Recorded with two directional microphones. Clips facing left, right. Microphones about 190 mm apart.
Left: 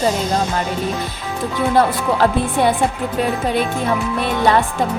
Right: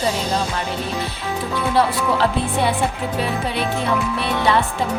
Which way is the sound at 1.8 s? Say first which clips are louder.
Left 2 dB; 45° left (ahead or behind).